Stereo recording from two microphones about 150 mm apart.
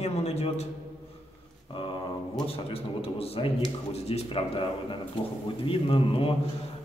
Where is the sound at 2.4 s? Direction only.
40° left (ahead or behind).